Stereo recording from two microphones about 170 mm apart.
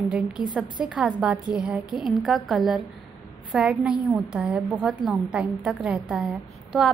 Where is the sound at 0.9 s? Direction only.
5° right (ahead or behind).